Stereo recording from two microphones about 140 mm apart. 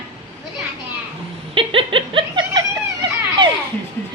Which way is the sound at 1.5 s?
40° right (ahead or behind).